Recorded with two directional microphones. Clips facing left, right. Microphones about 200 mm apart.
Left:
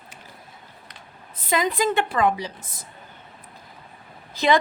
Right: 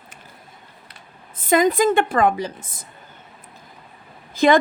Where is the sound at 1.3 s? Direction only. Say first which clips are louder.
Right 7 dB; 50° right (ahead or behind).